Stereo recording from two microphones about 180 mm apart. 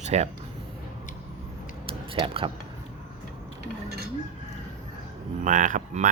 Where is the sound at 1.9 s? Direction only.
30° right (ahead or behind).